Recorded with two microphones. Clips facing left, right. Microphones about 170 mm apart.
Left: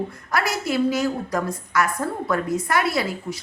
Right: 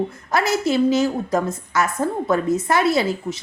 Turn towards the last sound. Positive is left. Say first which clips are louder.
# right 5 dB
turn(degrees=-25)  # may be behind; listen again after turning